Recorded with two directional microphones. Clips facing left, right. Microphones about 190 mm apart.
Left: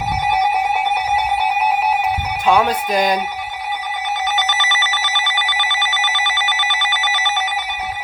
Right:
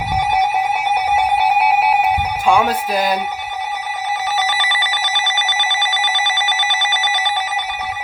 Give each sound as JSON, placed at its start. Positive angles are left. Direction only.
{"t": 2.5, "sound": "speech", "side_deg": -10}
{"t": 4.4, "sound": "telephone bell ringing", "side_deg": -10}